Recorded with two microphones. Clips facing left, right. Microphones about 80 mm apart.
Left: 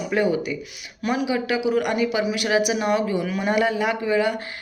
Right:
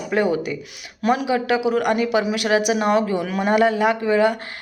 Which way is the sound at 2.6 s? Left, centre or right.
Right.